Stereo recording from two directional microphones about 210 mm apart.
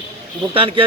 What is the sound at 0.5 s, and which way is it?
Speech, 25° right (ahead or behind).